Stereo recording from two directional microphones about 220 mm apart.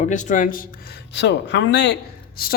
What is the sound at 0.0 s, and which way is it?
Speech, 35° left (ahead or behind).